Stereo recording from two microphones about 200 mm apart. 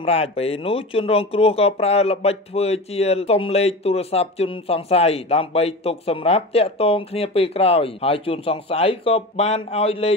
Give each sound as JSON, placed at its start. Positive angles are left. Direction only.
{"t": 0.0, "sound": "speech", "side_deg": 30}